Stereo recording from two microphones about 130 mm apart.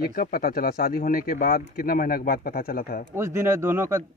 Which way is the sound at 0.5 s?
90° left.